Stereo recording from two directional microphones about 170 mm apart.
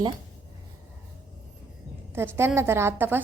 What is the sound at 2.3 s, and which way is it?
Speech, 15° right (ahead or behind).